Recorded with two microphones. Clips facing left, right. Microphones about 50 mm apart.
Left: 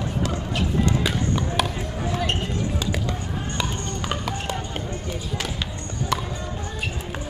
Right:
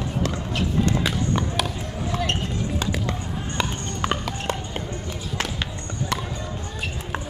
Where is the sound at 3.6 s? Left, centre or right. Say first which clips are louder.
Right 4 dB; right.